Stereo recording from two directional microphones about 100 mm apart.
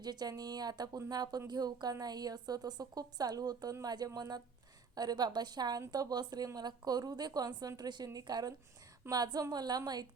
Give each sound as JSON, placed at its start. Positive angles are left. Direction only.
{"t": 0.0, "sound": "a woman's voice", "side_deg": -45}